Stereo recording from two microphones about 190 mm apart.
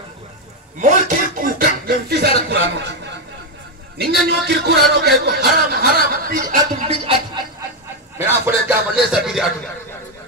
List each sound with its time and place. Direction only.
0.7 s a sound: 40° right (ahead or behind)
1.6 s a sound: 55° right (ahead or behind)
4.3 s speech: 55° right (ahead or behind)
6.6 s music: 25° right (ahead or behind)
8.2 s music: 10° right (ahead or behind)
9.1 s a man's voice: centre (ahead or behind)